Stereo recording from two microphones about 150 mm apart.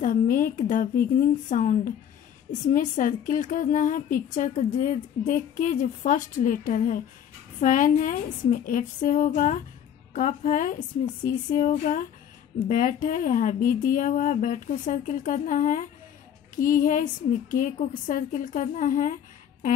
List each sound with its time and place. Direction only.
0.0 s a woman's voice: 60° left (ahead or behind)